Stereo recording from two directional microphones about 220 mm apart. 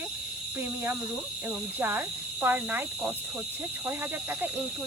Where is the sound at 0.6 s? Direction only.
10° right (ahead or behind).